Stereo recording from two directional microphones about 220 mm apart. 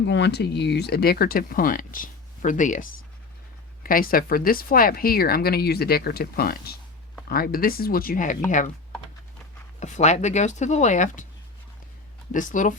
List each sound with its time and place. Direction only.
0.0 s speech: 55° left (ahead or behind); by 8.7 s 35° left (ahead or behind)
9.8 s speech: 30° left (ahead or behind)
12.3 s speech: 35° left (ahead or behind)